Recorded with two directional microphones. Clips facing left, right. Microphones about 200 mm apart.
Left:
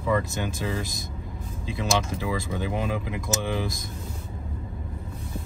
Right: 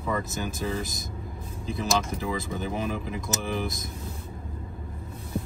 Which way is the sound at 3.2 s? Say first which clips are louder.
Left 2 dB; centre (ahead or behind).